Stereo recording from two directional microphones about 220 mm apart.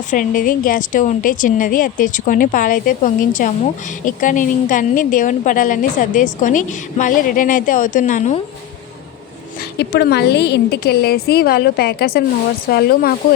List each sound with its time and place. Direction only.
0.1 s a woman's voice: 40° left (ahead or behind)
9.7 s a woman's voice: 45° left (ahead or behind)